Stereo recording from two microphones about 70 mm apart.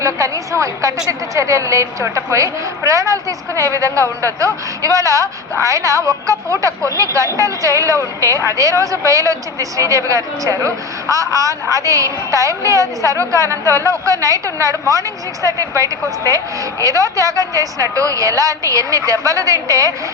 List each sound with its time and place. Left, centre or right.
0.0 s a woman's voice: right